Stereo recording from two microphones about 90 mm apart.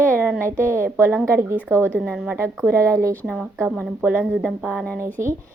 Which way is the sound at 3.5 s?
25° right (ahead or behind).